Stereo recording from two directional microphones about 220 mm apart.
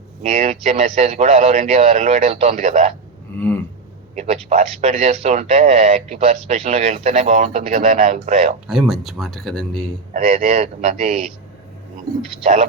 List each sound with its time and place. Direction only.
0.2 s speech: 30° right (ahead or behind)
4.1 s speech: 30° right (ahead or behind)
8.6 s speech: centre (ahead or behind)
10.1 s speech: 35° right (ahead or behind)
12.4 s speech: 30° right (ahead or behind)